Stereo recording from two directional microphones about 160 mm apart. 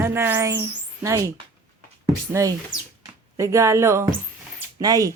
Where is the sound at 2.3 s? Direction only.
20° right (ahead or behind).